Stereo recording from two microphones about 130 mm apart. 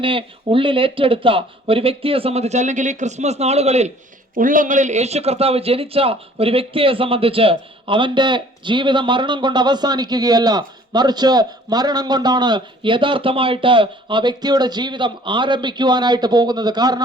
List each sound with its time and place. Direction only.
0.0 s speech: 40° right (ahead or behind); by 3.9 s 55° right (ahead or behind)
4.4 s a man's voice: 90° right; by 17.0 s 30° right (ahead or behind)